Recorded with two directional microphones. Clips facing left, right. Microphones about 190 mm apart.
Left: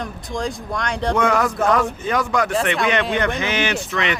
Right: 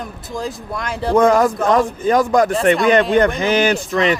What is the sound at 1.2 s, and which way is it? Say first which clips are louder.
Speech: right 7 dB; 35° right (ahead or behind).